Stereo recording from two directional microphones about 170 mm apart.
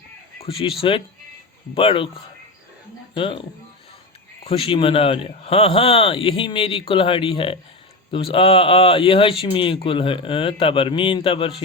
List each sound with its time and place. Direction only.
0.4 s speech: 30° left (ahead or behind)
4.4 s speech: 35° left (ahead or behind)